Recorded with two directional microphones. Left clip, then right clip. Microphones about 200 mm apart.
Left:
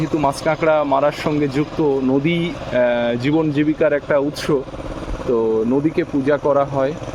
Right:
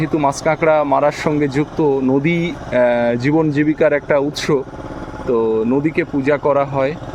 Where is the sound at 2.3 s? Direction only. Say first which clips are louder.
Right 2 dB; 70° right (ahead or behind).